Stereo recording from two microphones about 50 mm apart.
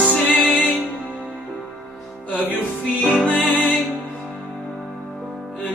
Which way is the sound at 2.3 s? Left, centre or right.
Left.